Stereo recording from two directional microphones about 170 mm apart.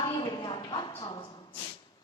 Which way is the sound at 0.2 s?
25° left (ahead or behind).